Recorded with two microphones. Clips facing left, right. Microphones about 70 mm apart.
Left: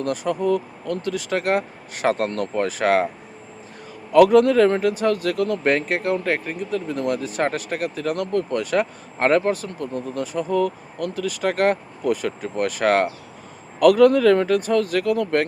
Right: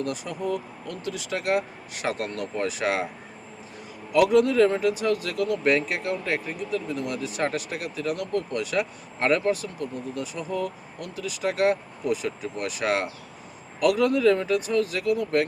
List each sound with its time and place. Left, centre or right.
0.0 s speech: left
4.1 s speech: left